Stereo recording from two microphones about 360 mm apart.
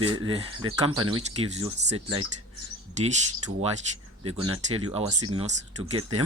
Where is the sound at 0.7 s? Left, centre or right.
Centre.